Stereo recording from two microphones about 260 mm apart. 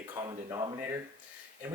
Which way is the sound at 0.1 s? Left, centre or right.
Centre.